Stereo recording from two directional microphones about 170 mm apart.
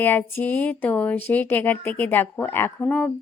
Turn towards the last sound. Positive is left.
turn(degrees=5)  # may be behind; listen again after turning